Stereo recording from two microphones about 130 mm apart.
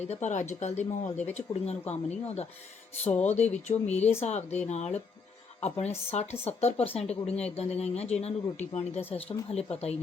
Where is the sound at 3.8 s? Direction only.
55° left (ahead or behind).